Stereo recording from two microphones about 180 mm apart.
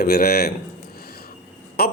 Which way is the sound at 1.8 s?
60° left (ahead or behind).